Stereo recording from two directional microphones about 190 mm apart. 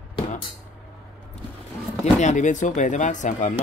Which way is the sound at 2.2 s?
40° left (ahead or behind).